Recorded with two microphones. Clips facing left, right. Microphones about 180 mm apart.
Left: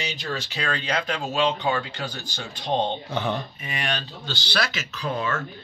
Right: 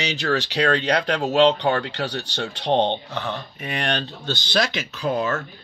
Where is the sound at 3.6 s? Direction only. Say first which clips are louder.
Right 5 dB; 60° right (ahead or behind).